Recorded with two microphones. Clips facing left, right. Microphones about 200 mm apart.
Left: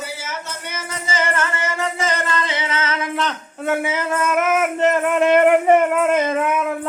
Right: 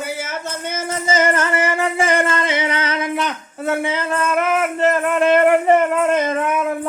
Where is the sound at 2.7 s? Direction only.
15° right (ahead or behind).